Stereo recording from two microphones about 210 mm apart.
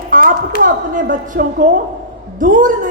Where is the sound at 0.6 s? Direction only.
40° right (ahead or behind).